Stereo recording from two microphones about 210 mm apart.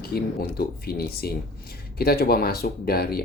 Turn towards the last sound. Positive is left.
turn(degrees=45)  # may be behind; listen again after turning